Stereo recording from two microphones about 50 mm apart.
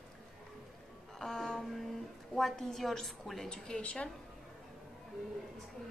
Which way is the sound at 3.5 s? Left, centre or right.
Centre.